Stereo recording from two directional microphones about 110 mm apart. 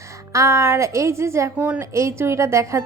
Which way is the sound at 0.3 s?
25° right (ahead or behind).